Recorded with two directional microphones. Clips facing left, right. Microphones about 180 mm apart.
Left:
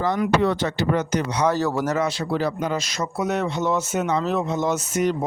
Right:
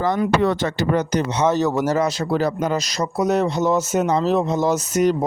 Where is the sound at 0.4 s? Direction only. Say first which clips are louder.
Right 2 dB; 45° right (ahead or behind).